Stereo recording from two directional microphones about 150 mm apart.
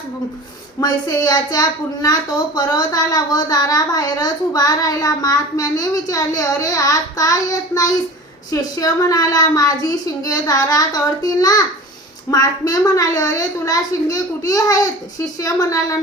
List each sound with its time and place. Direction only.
0.8 s a woman's voice: 25° left (ahead or behind)